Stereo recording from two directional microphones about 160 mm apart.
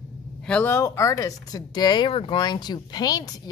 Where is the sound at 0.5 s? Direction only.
10° left (ahead or behind).